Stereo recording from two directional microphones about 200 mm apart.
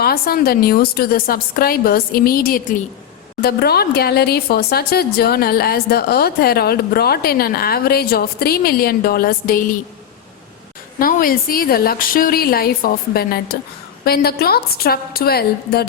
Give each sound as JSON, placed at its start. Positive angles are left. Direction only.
{"t": 0.0, "sound": "speech", "side_deg": 50}
{"t": 11.0, "sound": "speech", "side_deg": 45}